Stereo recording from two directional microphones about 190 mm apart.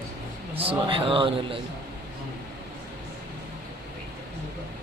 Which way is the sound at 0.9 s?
25° right (ahead or behind).